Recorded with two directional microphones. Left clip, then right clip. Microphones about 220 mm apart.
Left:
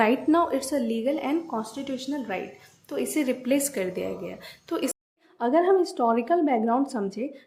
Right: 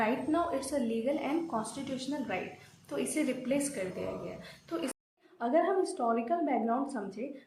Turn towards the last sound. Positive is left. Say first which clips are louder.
# left 8 dB
turn(degrees=40)  # may be behind; listen again after turning